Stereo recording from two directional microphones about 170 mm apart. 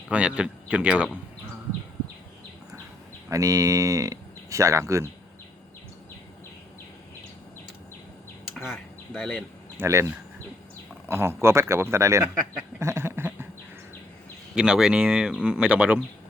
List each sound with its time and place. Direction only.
0.1 s speech: 5° right (ahead or behind)
3.2 s speech: 20° right (ahead or behind)
8.7 s speech: 5° left (ahead or behind)
9.7 s speech: 15° right (ahead or behind)
11.1 s speech: 15° right (ahead or behind)
14.5 s speech: 5° right (ahead or behind)